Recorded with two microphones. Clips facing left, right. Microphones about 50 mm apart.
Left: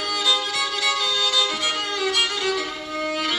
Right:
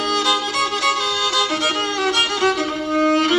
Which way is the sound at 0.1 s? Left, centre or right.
Right.